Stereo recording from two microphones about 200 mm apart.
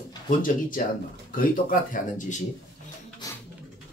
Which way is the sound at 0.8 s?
45° left (ahead or behind).